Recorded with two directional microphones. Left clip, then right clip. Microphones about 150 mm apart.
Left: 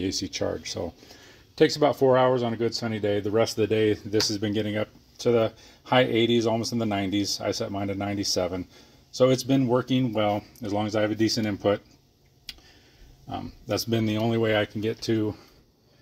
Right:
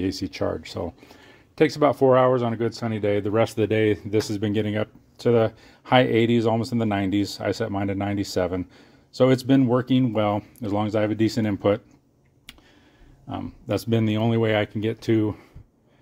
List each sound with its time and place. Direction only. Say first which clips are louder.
0.0 s speech: right 2 dB; 20° right (ahead or behind)
7.5 s speech: right 3 dB; 30° right (ahead or behind)
13.3 s speech: right 2 dB; 20° right (ahead or behind)